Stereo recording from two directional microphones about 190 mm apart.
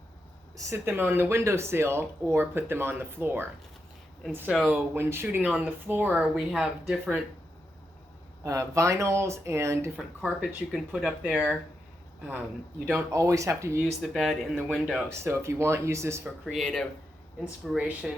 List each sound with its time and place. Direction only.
0.5 s speech: 15° right (ahead or behind)
5.5 s speech: 5° left (ahead or behind)
5.9 s speech: 10° right (ahead or behind)
8.4 s speech: 15° right (ahead or behind)
10.2 s speech: 5° right (ahead or behind)
12.8 s speech: 10° right (ahead or behind)
14.0 s speech: centre (ahead or behind)
15.2 s speech: 15° right (ahead or behind)
16.5 s speech: centre (ahead or behind)